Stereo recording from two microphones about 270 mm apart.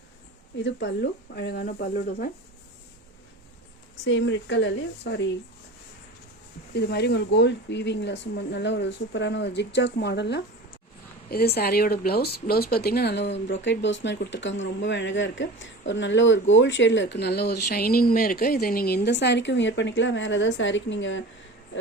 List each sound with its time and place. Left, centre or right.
0.6 s speech: left
4.0 s speech: left
6.7 s speech: left